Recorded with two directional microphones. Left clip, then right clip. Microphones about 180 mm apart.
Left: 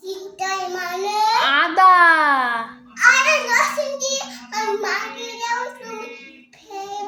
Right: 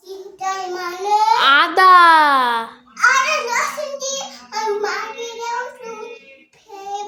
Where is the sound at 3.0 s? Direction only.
10° right (ahead or behind).